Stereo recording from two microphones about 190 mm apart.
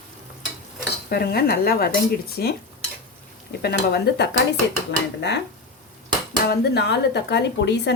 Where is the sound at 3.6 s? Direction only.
55° left (ahead or behind).